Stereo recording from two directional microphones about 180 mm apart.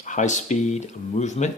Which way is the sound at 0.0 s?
40° left (ahead or behind).